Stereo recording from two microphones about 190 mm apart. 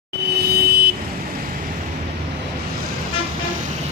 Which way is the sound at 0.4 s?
55° right (ahead or behind).